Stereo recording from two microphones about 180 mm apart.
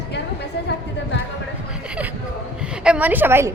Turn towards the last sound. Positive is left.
turn(degrees=-15)  # may be behind; listen again after turning